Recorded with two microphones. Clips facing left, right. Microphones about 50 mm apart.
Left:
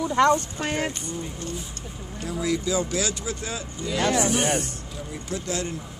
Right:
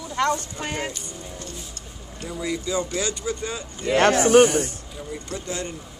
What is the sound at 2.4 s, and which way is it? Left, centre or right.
Speech, centre.